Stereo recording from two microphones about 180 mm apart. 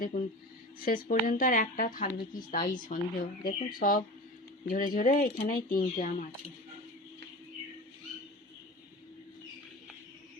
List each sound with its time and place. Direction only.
0.1 s speech: 40° left (ahead or behind)